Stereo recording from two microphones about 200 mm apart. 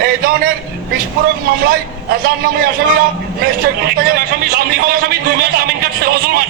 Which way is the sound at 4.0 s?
45° right (ahead or behind).